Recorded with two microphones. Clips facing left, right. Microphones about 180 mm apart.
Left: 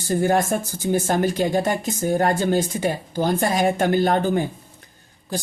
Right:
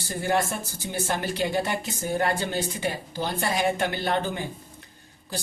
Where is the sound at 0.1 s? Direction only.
45° left (ahead or behind).